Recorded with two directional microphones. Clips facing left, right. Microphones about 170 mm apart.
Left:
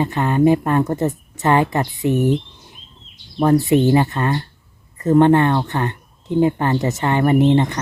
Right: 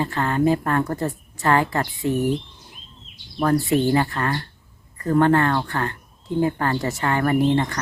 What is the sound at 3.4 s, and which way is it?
Speech, 20° left (ahead or behind).